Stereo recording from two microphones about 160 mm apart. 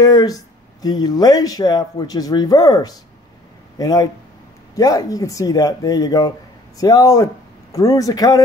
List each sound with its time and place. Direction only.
0.0 s speech: 25° left (ahead or behind)